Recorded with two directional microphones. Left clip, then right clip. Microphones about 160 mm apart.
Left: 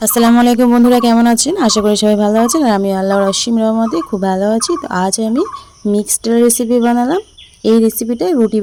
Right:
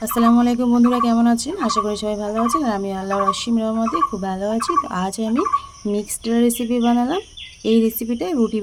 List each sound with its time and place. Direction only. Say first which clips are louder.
0.2 s speech: left 7 dB; 65° left (ahead or behind); by 8.6 s 40° left (ahead or behind)